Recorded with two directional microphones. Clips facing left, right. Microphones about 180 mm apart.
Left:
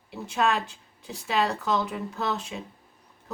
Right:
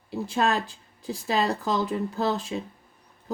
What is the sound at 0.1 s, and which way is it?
Speech, 35° right (ahead or behind).